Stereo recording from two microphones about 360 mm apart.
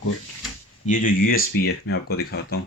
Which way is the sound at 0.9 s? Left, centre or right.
Left.